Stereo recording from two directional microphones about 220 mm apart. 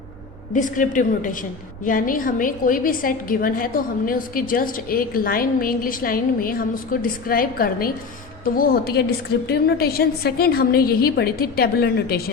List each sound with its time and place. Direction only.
0.5 s a woman's voice: 35° left (ahead or behind)